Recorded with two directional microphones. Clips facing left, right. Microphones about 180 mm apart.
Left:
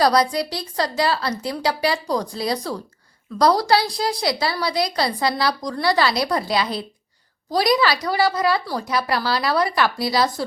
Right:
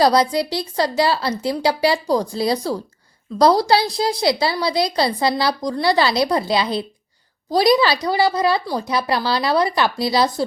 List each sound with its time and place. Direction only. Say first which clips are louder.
0.0 s a woman's voice: right 2 dB; 25° right (ahead or behind)